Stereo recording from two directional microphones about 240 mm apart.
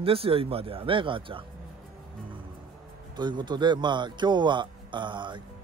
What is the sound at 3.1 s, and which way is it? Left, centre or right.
A man's voice, centre.